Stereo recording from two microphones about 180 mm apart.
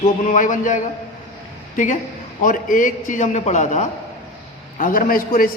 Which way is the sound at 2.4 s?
50° left (ahead or behind).